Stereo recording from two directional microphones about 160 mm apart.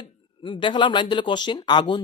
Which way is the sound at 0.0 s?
30° left (ahead or behind).